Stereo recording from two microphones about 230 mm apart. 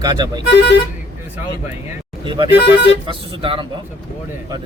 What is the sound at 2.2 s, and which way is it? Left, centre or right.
Speech, right.